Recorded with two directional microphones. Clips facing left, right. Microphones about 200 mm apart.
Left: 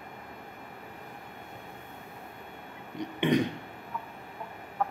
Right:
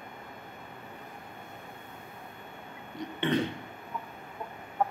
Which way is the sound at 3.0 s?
15° left (ahead or behind).